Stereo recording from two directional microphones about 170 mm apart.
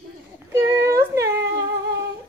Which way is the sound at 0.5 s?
15° right (ahead or behind).